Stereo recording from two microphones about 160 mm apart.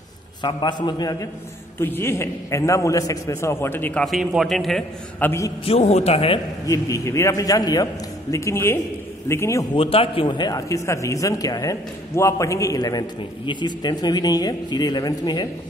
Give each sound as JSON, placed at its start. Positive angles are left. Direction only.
{"t": 0.4, "sound": "a man's voice", "side_deg": 30}
{"t": 1.8, "sound": "a man's voice", "side_deg": 15}
{"t": 4.0, "sound": "a man's voice", "side_deg": 0}
{"t": 5.7, "sound": "a man's voice", "side_deg": 40}
{"t": 6.6, "sound": "a man's voice", "side_deg": 20}
{"t": 9.8, "sound": "a man's voice", "side_deg": 35}